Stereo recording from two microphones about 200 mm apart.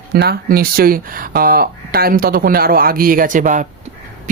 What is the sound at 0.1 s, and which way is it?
Speech, 50° right (ahead or behind).